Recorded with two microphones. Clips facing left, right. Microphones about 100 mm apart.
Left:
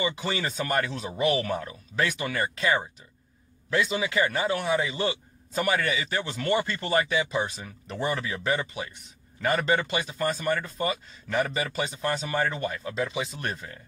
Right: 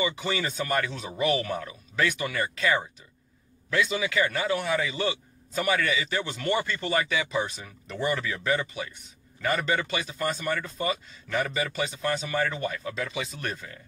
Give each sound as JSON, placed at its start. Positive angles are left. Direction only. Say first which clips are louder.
{"t": 0.0, "sound": "a man's voice", "louder": "even", "side_deg": 35}